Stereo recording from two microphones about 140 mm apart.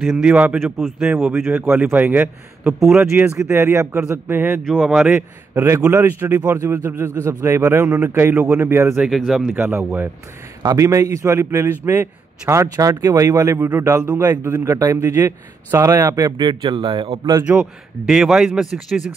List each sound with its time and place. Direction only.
0.1 s a man's voice: 10° right (ahead or behind)
0.6 s speech: centre (ahead or behind)
1.1 s a man's voice: 15° right (ahead or behind)
4.6 s speech: centre (ahead or behind)
5.1 s a man's voice: 20° right (ahead or behind)
9.0 s speech: centre (ahead or behind)
9.5 s a man's voice: 15° right (ahead or behind)
10.6 s a man's voice: 25° right (ahead or behind)
17.5 s speech: 5° right (ahead or behind)